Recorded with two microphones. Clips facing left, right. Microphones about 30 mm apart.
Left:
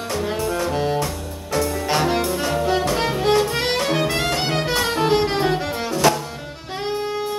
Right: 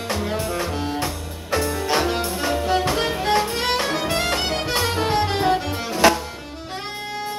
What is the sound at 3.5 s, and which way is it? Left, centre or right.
Music, centre.